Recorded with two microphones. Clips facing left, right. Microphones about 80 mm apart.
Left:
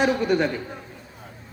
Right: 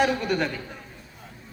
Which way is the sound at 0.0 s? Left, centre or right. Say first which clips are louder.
Left 3 dB; centre.